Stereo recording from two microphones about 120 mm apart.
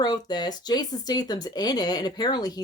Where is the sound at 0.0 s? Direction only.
35° left (ahead or behind).